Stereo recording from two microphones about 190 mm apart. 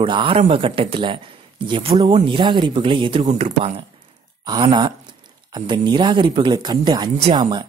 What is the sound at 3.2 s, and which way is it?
Speech, 40° right (ahead or behind).